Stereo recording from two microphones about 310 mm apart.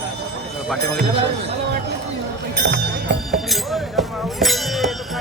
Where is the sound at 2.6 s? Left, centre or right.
Right.